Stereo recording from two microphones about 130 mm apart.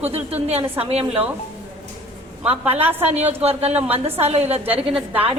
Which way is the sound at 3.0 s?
55° right (ahead or behind).